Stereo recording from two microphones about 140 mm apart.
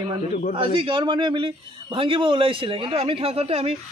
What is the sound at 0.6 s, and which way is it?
A man's voice, 40° right (ahead or behind).